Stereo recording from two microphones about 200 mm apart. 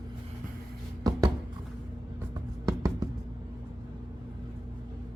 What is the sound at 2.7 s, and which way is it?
Music, 20° right (ahead or behind).